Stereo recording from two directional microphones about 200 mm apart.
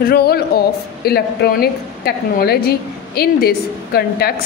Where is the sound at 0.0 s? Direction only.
50° left (ahead or behind).